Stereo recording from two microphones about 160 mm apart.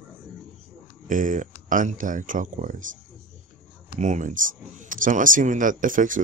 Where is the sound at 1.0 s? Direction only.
55° right (ahead or behind).